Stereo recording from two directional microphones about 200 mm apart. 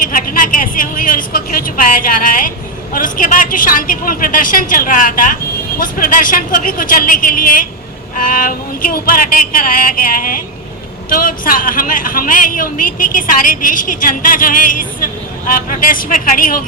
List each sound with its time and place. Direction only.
0.0 s a woman's voice: 45° left (ahead or behind)